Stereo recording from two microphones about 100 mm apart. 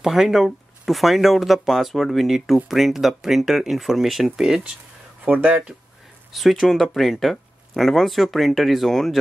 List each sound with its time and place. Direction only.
0.0 s speech: centre (ahead or behind)
6.3 s speech: centre (ahead or behind)